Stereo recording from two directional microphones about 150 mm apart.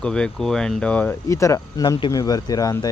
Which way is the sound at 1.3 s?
20° left (ahead or behind).